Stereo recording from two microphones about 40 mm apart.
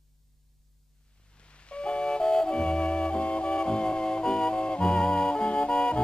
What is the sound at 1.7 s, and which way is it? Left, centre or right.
Music, left.